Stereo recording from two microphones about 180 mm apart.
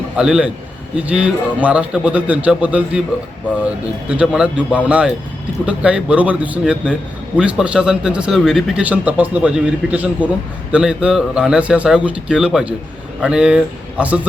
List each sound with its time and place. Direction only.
0.2 s a man's voice: 5° right (ahead or behind)
4.1 s a man's voice: 5° right (ahead or behind)